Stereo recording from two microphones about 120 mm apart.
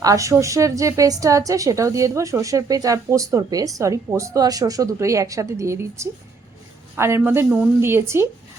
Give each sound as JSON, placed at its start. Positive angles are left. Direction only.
{"t": 0.0, "sound": "a woman's voice", "side_deg": -25}